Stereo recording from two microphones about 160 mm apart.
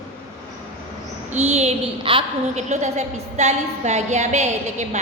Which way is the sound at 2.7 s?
45° right (ahead or behind).